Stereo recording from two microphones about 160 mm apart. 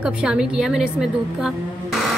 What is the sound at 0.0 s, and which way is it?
Speech, 5° right (ahead or behind).